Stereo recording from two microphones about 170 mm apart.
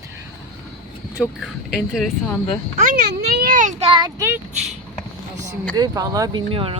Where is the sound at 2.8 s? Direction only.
50° right (ahead or behind).